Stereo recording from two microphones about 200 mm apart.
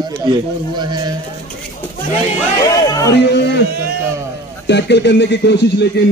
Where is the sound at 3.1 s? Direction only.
55° left (ahead or behind).